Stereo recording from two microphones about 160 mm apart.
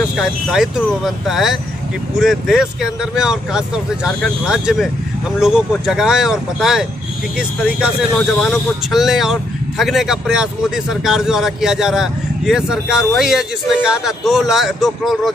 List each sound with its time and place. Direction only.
0.1 s speech: 5° right (ahead or behind)